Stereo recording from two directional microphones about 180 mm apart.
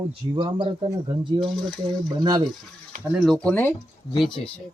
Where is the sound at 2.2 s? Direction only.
25° right (ahead or behind).